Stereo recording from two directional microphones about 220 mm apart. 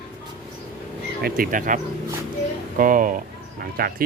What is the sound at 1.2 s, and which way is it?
Speech, 40° right (ahead or behind).